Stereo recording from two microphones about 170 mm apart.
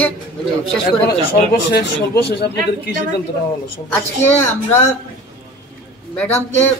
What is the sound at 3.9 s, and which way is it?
Speech, 10° left (ahead or behind).